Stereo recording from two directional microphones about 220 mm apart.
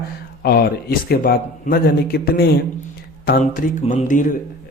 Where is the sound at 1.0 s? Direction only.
45° left (ahead or behind).